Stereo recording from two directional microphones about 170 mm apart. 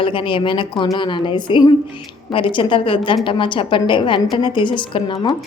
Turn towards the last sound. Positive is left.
turn(degrees=30)  # may be behind; listen again after turning